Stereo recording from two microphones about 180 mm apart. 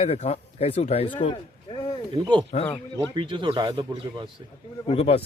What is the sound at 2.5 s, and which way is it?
Speech, 45° left (ahead or behind).